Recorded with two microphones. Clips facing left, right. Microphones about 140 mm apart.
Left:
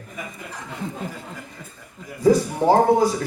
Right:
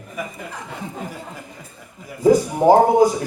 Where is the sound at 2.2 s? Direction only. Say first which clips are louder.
Right 3 dB; 15° right (ahead or behind).